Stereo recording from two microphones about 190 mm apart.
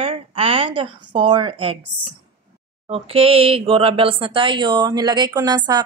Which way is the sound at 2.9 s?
30° right (ahead or behind).